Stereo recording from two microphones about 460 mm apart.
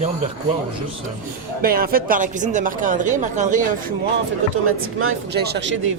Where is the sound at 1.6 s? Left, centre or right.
Centre.